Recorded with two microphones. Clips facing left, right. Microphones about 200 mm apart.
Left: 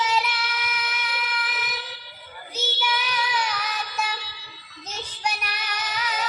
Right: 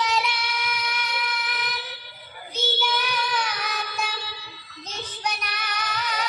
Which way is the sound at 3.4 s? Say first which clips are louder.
Left 1 dB; 55° right (ahead or behind).